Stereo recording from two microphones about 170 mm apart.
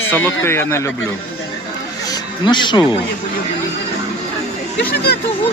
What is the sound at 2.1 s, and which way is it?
Speech, 25° left (ahead or behind).